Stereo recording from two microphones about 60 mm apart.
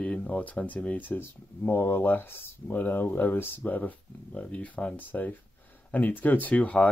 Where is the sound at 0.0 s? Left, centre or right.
Left.